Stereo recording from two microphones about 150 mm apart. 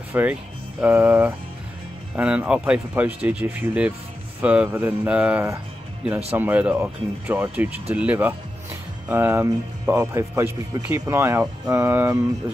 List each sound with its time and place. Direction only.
0.1 s speech: 10° right (ahead or behind)